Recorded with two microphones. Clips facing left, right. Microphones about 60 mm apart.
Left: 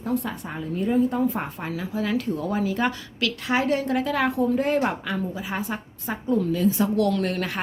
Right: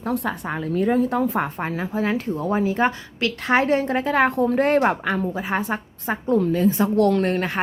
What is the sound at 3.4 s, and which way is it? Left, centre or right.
A woman's voice, right.